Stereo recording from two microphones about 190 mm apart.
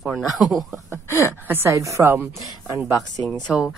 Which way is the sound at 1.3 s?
10° right (ahead or behind).